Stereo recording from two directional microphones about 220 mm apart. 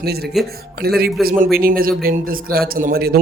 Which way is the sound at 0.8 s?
45° right (ahead or behind).